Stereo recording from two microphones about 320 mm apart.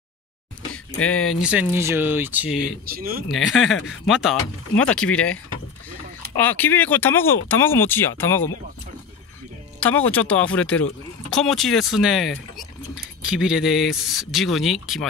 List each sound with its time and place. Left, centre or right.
0.9 s speech: left
1.4 s speech: centre
3.0 s speech: right
3.3 s speech: centre
3.7 s speech: left
4.1 s speech: centre
9.8 s speech: centre